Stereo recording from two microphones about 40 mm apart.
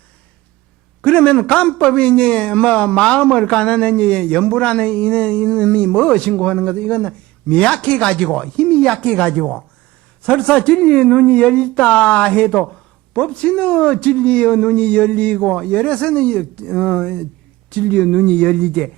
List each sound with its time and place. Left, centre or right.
1.0 s a man's voice: left